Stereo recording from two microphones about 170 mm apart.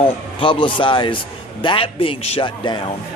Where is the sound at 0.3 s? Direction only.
30° left (ahead or behind).